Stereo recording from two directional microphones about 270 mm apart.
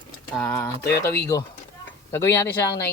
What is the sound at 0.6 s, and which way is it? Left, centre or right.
Speech, centre.